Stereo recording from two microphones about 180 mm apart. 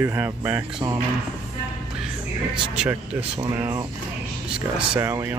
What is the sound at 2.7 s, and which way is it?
Speech, 5° right (ahead or behind).